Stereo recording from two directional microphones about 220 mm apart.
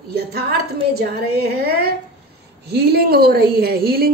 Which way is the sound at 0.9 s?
45° right (ahead or behind).